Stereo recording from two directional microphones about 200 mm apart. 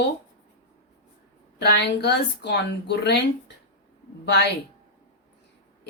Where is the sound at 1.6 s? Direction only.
60° left (ahead or behind).